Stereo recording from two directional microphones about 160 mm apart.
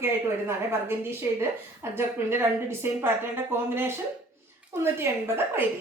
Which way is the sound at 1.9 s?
15° right (ahead or behind).